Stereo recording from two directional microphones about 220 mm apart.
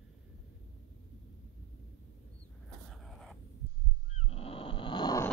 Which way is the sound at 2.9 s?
Centre (ahead or behind).